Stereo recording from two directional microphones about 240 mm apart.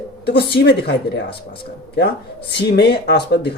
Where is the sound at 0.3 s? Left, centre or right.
Left.